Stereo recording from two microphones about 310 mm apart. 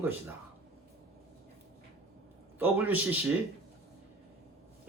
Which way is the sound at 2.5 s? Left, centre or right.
Centre.